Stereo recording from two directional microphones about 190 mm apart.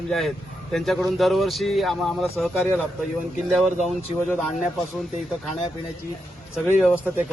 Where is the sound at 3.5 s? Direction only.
Centre (ahead or behind).